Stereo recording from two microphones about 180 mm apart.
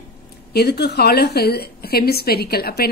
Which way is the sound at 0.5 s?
65° left (ahead or behind).